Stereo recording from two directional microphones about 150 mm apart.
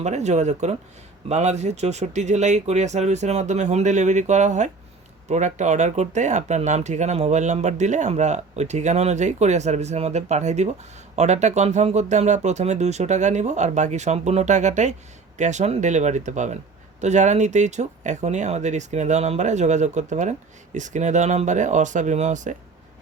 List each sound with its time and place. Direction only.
0.0 s speech: 50° right (ahead or behind)